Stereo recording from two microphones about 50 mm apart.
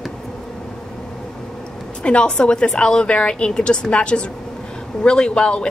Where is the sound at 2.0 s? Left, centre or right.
Left.